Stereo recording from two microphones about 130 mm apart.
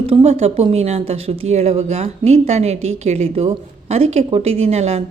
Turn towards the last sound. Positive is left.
turn(degrees=-55)  # may be behind; listen again after turning